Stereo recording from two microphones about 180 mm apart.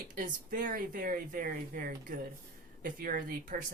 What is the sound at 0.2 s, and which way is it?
Speech, 50° right (ahead or behind).